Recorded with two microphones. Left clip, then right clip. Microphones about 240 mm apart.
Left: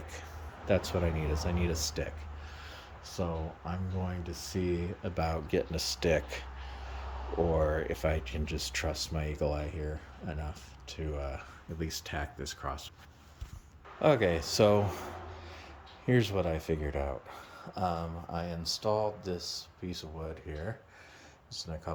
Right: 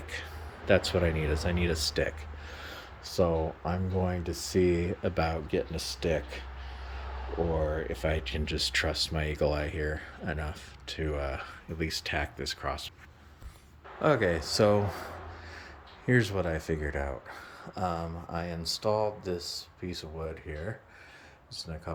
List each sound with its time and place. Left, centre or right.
0.7 s speech: centre
5.2 s speech: centre
7.5 s speech: centre
14.0 s speech: centre
16.0 s speech: centre
21.5 s speech: centre